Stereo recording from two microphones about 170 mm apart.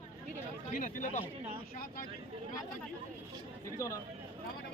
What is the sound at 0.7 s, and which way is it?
Speech, 50° left (ahead or behind).